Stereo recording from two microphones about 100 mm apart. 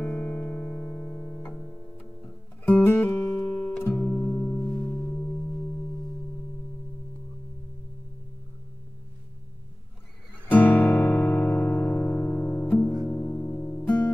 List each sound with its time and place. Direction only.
0.0 s music: 15° left (ahead or behind)
10.5 s music: 15° left (ahead or behind)